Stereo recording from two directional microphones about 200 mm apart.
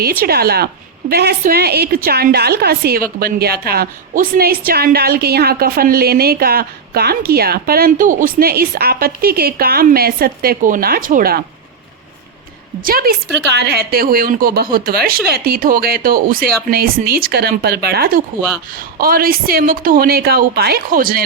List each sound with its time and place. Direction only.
0.0 s a woman's voice: 50° right (ahead or behind)
12.8 s a woman's voice: 45° right (ahead or behind)